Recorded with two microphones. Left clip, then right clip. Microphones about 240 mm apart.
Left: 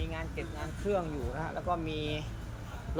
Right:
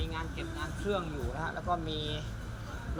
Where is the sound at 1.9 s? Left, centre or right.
Centre.